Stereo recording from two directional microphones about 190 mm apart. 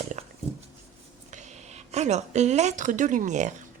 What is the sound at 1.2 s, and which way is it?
Speech, 40° right (ahead or behind).